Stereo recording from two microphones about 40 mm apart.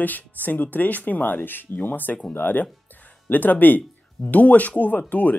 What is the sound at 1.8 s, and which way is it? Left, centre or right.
Speech, left.